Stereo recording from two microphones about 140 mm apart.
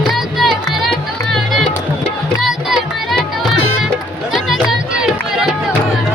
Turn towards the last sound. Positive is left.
turn(degrees=-5)  # may be behind; listen again after turning